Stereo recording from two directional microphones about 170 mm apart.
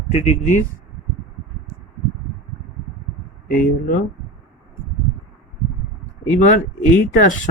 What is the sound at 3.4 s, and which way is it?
Speech, 55° left (ahead or behind).